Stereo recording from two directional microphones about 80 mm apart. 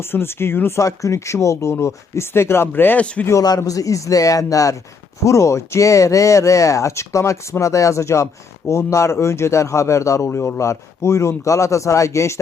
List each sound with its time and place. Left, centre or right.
0.0 s speech: left
0.8 s speech: left
3.0 s a man's voice: centre
3.6 s a man's voice: left